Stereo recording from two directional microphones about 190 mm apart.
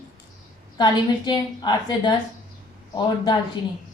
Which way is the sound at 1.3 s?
20° left (ahead or behind).